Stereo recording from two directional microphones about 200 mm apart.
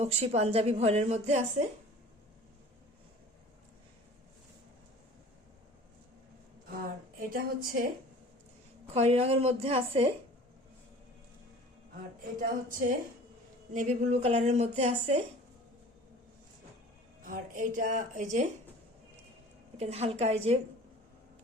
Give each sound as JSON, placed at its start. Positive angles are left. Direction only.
{"t": 0.0, "sound": "a woman's voice", "side_deg": -30}
{"t": 7.2, "sound": "a woman's voice", "side_deg": -45}
{"t": 8.9, "sound": "a woman's voice", "side_deg": -30}
{"t": 12.4, "sound": "a woman's voice", "side_deg": -45}
{"t": 17.2, "sound": "a woman's voice", "side_deg": -40}
{"t": 19.7, "sound": "a woman's voice", "side_deg": -30}